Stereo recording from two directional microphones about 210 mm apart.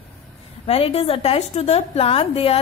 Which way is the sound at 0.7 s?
30° left (ahead or behind).